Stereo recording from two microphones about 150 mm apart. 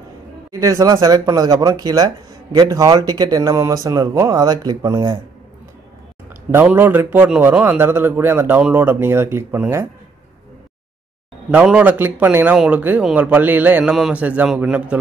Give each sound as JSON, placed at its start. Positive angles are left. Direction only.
{"t": 0.5, "sound": "speech", "side_deg": -20}
{"t": 6.5, "sound": "speech", "side_deg": -10}
{"t": 11.5, "sound": "speech", "side_deg": -10}